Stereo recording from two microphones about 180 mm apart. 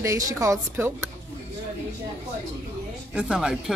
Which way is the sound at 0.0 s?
15° right (ahead or behind).